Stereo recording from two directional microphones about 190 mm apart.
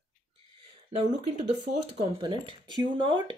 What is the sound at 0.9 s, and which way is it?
Speech, 35° right (ahead or behind).